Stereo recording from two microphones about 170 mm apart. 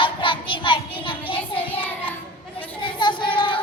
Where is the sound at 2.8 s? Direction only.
25° left (ahead or behind).